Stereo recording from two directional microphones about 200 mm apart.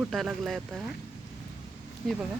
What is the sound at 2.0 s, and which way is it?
Speech, centre (ahead or behind).